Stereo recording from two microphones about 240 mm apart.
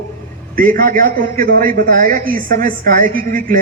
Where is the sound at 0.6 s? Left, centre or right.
Right.